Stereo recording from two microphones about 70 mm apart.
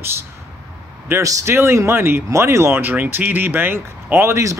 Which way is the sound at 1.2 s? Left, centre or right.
Right.